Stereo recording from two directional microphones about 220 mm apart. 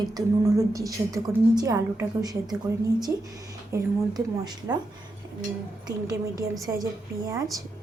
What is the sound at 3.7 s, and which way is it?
A woman's voice, 20° right (ahead or behind).